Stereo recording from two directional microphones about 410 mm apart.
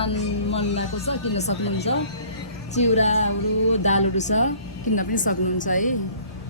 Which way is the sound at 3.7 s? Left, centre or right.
Centre.